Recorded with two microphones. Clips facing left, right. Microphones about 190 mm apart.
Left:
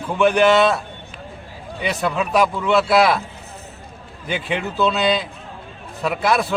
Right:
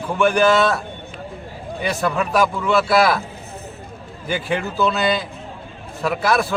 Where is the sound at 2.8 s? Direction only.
25° left (ahead or behind).